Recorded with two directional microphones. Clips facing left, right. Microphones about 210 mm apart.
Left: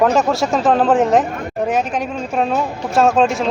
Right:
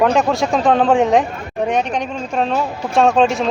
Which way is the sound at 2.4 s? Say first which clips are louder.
Even; 5° left (ahead or behind).